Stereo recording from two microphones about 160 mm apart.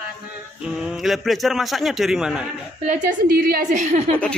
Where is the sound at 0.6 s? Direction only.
5° right (ahead or behind).